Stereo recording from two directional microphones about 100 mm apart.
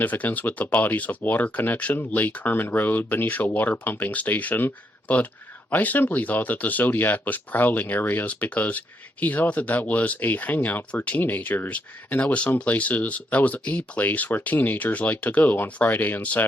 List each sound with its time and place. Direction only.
0.0 s speech: 15° left (ahead or behind)